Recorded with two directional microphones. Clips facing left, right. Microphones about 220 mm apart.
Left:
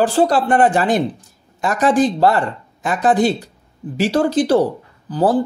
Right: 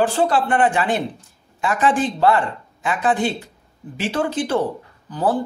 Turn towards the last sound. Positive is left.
turn(degrees=35)  # may be behind; listen again after turning